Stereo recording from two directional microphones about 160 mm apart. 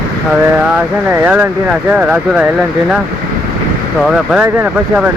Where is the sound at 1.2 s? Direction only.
10° right (ahead or behind).